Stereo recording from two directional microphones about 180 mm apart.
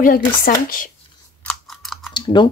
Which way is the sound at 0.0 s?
50° left (ahead or behind).